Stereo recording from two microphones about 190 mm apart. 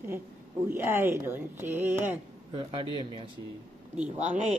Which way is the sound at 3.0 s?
25° right (ahead or behind).